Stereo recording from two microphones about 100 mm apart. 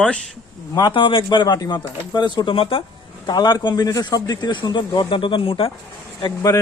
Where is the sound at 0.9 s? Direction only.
55° left (ahead or behind).